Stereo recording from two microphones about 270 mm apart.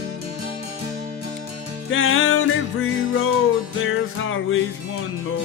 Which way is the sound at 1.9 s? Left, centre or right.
Left.